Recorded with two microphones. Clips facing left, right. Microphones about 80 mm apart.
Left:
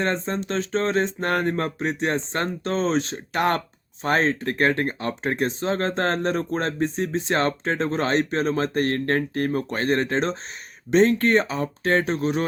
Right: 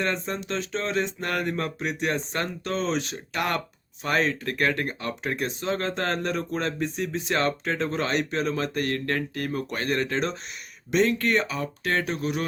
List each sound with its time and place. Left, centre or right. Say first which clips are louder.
0.0 s speech: left 3 dB; left